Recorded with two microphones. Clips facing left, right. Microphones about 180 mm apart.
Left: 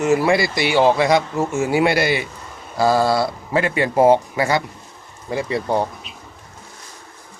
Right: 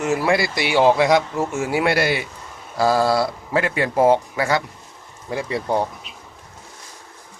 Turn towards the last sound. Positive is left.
turn(degrees=0)  # may be behind; listen again after turning